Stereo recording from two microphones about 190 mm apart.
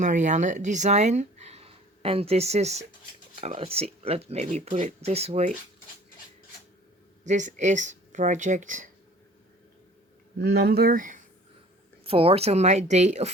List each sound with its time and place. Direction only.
0.0 s speech: 40° right (ahead or behind)
7.3 s speech: 40° right (ahead or behind)
10.3 s speech: 60° right (ahead or behind)
12.0 s speech: 30° right (ahead or behind)